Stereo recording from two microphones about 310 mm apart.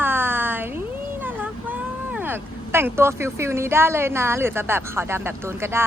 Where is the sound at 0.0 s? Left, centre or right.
Centre.